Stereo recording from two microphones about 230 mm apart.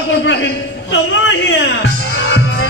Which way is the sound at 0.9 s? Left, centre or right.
Left.